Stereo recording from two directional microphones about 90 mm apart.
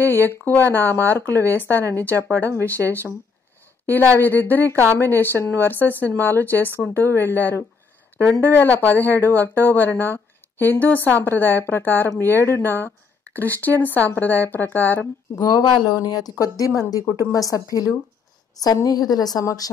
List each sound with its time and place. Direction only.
0.0 s speech: 25° left (ahead or behind)
3.8 s speech: 20° left (ahead or behind)
15.3 s a woman's voice: 45° left (ahead or behind)
18.6 s speech: 45° left (ahead or behind)